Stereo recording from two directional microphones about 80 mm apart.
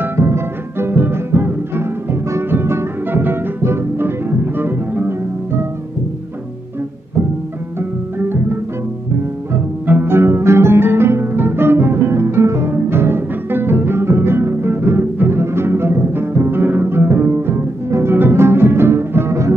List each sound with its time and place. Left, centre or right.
0.0 s music: right
8.2 s music: right
9.8 s music: right